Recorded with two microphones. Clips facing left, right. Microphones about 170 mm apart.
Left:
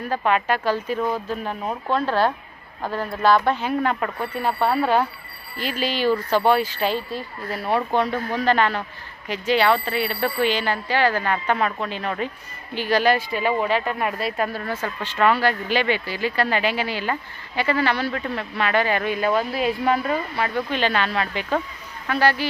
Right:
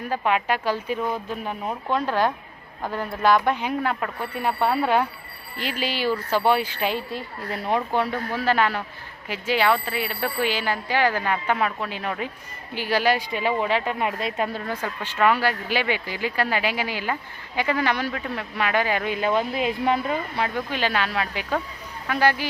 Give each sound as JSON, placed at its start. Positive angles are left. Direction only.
{"t": 0.1, "sound": "a woman's voice", "side_deg": -10}